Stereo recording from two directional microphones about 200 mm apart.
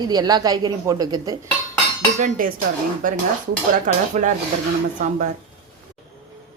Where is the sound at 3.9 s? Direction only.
40° right (ahead or behind).